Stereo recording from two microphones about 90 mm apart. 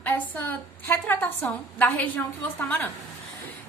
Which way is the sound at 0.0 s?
20° left (ahead or behind).